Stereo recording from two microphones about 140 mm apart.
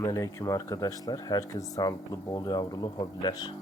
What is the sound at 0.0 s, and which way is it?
Speech, 25° left (ahead or behind).